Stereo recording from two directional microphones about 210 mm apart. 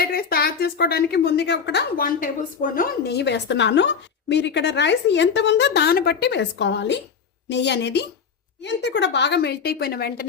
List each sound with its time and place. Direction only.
0.0 s a woman's voice: 45° left (ahead or behind)